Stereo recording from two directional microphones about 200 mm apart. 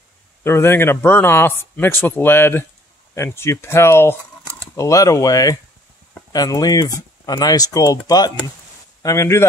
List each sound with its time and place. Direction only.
0.4 s a man's voice: 10° left (ahead or behind)